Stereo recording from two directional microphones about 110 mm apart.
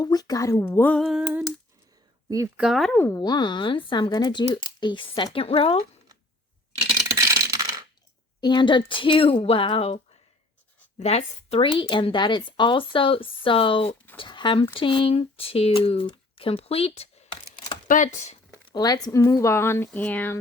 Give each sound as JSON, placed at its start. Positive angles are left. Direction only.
{"t": 0.0, "sound": "speech", "side_deg": 35}
{"t": 1.0, "sound": "speech", "side_deg": -5}
{"t": 2.6, "sound": "speech", "side_deg": 0}
{"t": 2.9, "sound": "speech", "side_deg": 20}
{"t": 3.2, "sound": "speech", "side_deg": 40}
{"t": 7.1, "sound": "coin", "side_deg": -30}
{"t": 8.4, "sound": "speech", "side_deg": 45}
{"t": 11.0, "sound": "speech", "side_deg": 80}
{"t": 18.0, "sound": "speech", "side_deg": 90}
{"t": 18.7, "sound": "speech", "side_deg": 35}